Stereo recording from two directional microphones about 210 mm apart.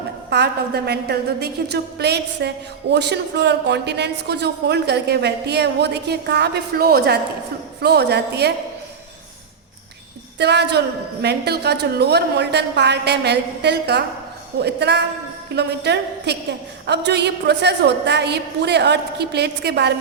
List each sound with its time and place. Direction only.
0.3 s a woman's voice: 50° right (ahead or behind)
10.3 s a woman's voice: 55° right (ahead or behind)